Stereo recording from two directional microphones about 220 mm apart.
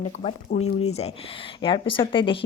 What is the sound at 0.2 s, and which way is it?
Speech, 30° left (ahead or behind).